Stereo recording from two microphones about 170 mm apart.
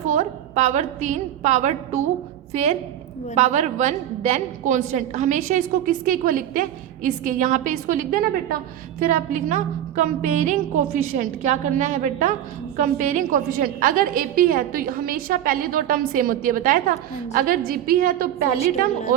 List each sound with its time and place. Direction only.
0.1 s a woman's voice: 45° right (ahead or behind); by 18.9 s 60° right (ahead or behind)